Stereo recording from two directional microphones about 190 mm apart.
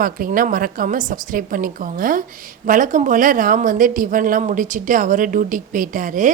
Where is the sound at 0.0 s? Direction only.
45° right (ahead or behind).